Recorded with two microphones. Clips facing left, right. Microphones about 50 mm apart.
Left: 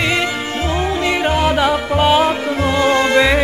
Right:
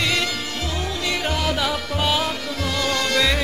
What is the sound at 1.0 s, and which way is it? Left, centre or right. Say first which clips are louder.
Music: left 7 dB; left.